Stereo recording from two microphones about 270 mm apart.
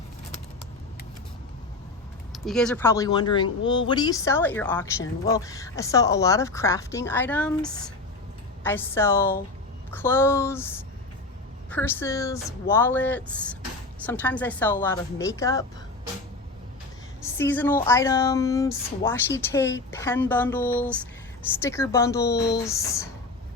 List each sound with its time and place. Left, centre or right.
2.3 s speech: centre
17.2 s speech: centre
22.2 s speech: left
22.5 s speech: centre